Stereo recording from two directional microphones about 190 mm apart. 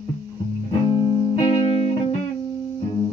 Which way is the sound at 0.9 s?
25° left (ahead or behind).